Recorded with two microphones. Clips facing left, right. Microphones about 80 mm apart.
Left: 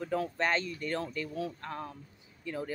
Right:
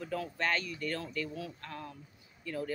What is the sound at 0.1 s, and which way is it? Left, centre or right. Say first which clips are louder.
Speech: left 3 dB; left.